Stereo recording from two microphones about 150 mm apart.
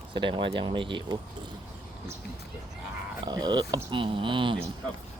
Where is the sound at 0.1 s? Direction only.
35° right (ahead or behind).